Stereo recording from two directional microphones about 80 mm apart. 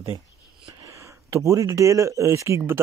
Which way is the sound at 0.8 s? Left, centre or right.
Right.